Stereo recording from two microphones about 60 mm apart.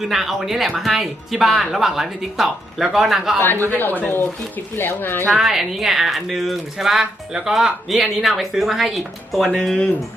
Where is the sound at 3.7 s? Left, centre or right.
Left.